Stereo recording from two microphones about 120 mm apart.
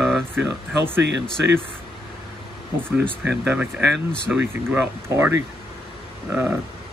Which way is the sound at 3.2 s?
10° right (ahead or behind).